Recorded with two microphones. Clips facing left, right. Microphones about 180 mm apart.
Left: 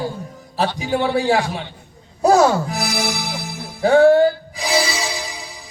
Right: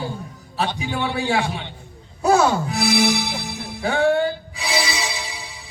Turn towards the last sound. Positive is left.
turn(degrees=35)  # may be behind; listen again after turning